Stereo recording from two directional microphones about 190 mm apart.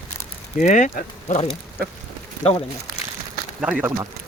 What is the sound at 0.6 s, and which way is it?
Speech, 40° left (ahead or behind).